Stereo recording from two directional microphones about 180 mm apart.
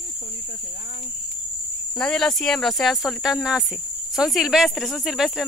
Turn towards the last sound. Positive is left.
turn(degrees=0)  # may be behind; listen again after turning